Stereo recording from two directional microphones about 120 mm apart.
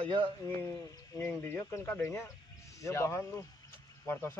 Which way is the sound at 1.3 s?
20° left (ahead or behind).